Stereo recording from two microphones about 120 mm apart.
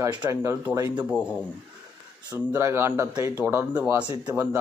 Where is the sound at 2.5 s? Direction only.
20° right (ahead or behind).